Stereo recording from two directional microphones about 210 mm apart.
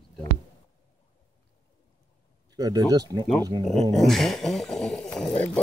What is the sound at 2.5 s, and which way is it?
Speech, 20° right (ahead or behind).